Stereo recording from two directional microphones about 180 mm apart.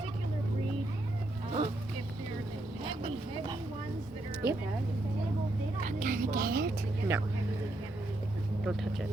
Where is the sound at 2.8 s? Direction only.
30° right (ahead or behind).